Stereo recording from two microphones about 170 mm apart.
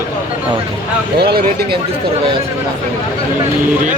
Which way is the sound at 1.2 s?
70° right (ahead or behind).